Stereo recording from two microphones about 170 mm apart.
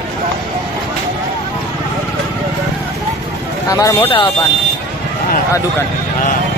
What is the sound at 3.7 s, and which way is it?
Speech, 20° left (ahead or behind).